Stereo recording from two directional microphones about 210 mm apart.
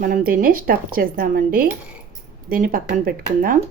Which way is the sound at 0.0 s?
45° right (ahead or behind).